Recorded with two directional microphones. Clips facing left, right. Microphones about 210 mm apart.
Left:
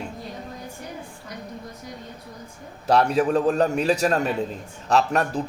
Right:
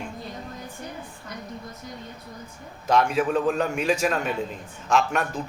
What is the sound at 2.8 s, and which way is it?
A man's voice, 35° left (ahead or behind).